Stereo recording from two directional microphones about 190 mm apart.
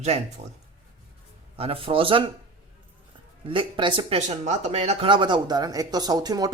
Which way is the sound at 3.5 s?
25° right (ahead or behind).